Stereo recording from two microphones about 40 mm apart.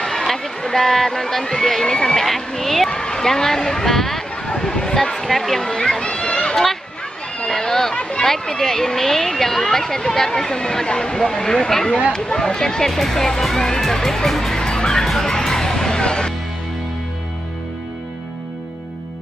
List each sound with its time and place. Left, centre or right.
0.0 s speech: centre
2.9 s speech: centre
6.5 s speech: centre
8.0 s speech: left
8.3 s speech: centre
15.0 s music: centre